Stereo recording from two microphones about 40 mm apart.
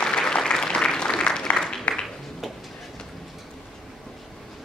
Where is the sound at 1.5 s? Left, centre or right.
Centre.